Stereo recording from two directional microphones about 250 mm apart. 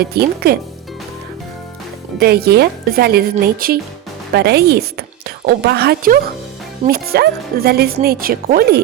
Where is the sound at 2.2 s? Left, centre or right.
Right.